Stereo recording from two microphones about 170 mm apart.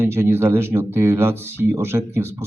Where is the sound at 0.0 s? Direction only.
15° right (ahead or behind).